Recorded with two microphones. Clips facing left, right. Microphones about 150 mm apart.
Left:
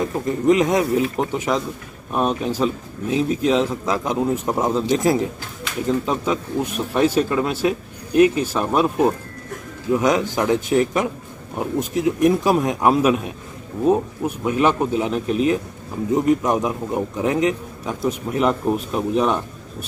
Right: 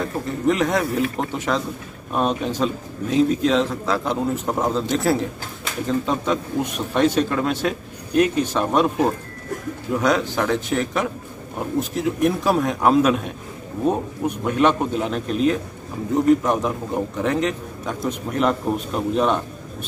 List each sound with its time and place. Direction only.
0.0 s a man's voice: 15° left (ahead or behind)